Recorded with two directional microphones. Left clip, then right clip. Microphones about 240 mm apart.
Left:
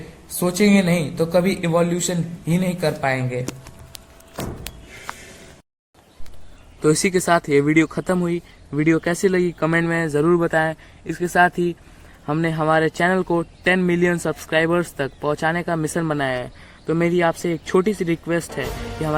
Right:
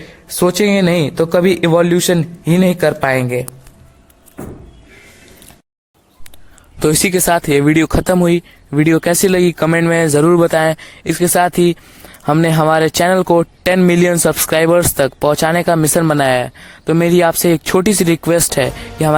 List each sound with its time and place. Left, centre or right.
0.3 s speech: right
6.7 s speech: right
18.7 s speech: centre